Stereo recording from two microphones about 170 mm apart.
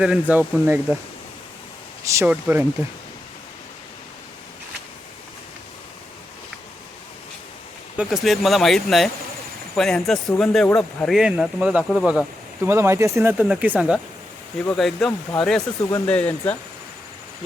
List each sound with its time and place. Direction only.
0.0 s speech: 5° right (ahead or behind)
2.0 s speech: 20° right (ahead or behind)
7.9 s speech: centre (ahead or behind)
12.6 s speech: 15° right (ahead or behind)
14.6 s speech: 5° left (ahead or behind)
15.8 s speech: 15° left (ahead or behind)